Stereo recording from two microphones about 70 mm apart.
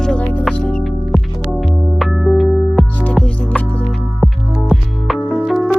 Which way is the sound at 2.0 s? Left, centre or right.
Centre.